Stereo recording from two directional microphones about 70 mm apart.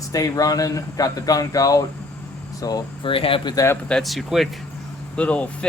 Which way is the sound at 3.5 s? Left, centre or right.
Left.